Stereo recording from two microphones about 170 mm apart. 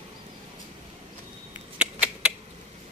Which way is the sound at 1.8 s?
5° right (ahead or behind).